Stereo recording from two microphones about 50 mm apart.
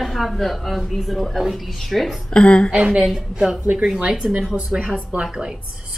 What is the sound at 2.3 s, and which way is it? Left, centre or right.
Speech, left.